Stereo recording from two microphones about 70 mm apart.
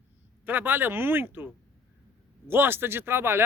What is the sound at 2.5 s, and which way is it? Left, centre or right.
Speech, right.